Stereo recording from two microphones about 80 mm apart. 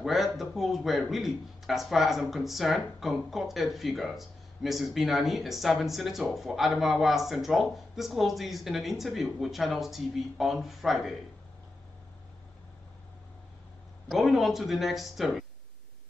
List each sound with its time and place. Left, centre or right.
0.0 s speech: centre
14.1 s speech: centre